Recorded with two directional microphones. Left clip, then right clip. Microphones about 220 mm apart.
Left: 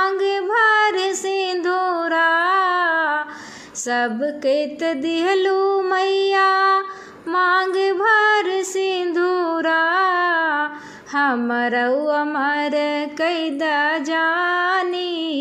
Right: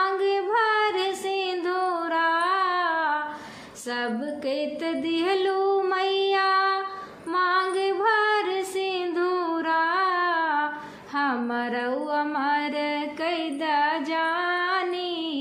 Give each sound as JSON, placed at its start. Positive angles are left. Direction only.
{"t": 0.0, "sound": "female singing", "side_deg": 35}
{"t": 3.9, "sound": "music", "side_deg": 35}
{"t": 7.3, "sound": "female singing", "side_deg": 35}
{"t": 11.1, "sound": "mantra", "side_deg": 35}